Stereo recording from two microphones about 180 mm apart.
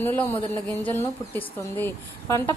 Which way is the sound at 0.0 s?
10° left (ahead or behind).